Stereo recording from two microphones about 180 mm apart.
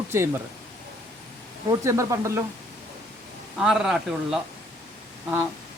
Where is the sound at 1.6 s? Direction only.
15° right (ahead or behind).